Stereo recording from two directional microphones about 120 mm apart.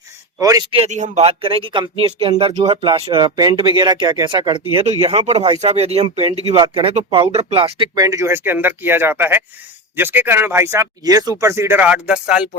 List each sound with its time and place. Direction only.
0.3 s speech: 30° right (ahead or behind)
0.9 s speech: 80° right
1.2 s speech: 50° right (ahead or behind)
4.9 s speech: 60° right (ahead or behind)
6.6 s speech: 45° right (ahead or behind)
7.9 s speech: 30° right (ahead or behind)
11.0 s speech: 30° right (ahead or behind)
11.8 s speech: 10° right (ahead or behind)